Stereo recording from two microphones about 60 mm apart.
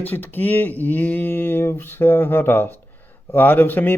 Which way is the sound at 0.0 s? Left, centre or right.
Left.